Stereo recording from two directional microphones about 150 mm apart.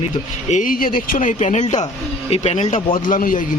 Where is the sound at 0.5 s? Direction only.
65° left (ahead or behind); by 2.8 s 50° left (ahead or behind).